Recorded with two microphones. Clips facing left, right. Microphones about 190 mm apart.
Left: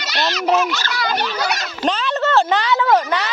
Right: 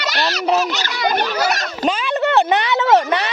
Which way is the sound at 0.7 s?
20° right (ahead or behind).